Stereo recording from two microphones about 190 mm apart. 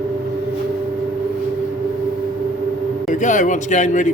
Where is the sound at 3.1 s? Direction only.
40° left (ahead or behind).